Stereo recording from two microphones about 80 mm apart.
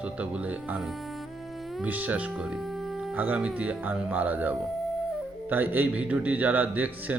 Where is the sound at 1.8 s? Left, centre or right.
Right.